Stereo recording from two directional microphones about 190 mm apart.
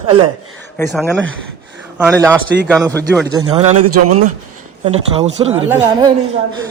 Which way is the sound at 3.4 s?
15° right (ahead or behind).